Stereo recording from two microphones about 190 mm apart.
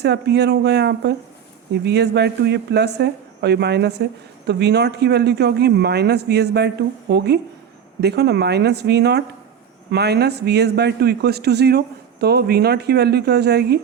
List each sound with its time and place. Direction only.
0.0 s speech: 60° right (ahead or behind)